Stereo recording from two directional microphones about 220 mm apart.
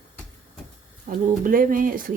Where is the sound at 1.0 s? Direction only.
40° right (ahead or behind).